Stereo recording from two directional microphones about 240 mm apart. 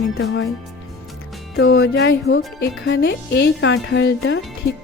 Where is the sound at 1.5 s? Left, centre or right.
Left.